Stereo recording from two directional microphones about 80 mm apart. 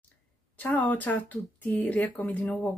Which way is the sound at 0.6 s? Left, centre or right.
Left.